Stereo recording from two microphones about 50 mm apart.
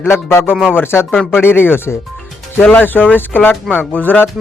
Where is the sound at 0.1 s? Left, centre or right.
Left.